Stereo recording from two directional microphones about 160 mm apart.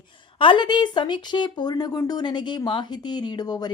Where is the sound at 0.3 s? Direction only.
30° left (ahead or behind).